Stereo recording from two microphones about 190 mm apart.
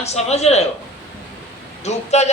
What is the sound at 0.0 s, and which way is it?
Speech, 35° left (ahead or behind).